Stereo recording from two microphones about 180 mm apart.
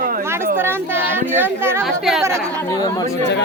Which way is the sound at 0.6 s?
10° right (ahead or behind).